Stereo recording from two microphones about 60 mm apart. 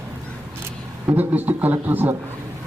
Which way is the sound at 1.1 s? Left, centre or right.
Right.